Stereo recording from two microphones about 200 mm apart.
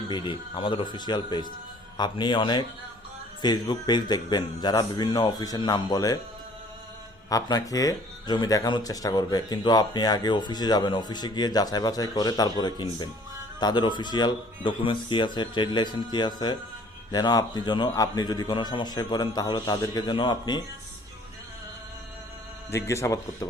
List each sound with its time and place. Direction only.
0.1 s speech: 25° left (ahead or behind)
7.3 s speech: 20° left (ahead or behind)
22.7 s a man's voice: 15° left (ahead or behind)